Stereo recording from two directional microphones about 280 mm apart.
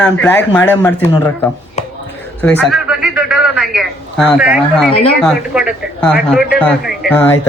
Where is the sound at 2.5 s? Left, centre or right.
Centre.